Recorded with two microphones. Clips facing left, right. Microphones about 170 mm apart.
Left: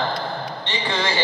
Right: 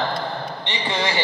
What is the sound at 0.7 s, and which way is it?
Speech, 20° right (ahead or behind).